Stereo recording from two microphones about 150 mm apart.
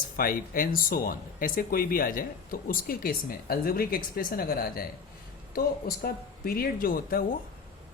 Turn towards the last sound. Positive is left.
turn(degrees=70)  # may be behind; listen again after turning